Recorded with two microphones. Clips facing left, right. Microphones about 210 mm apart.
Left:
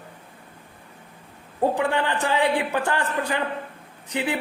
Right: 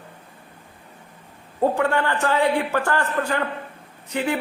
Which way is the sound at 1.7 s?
15° left (ahead or behind).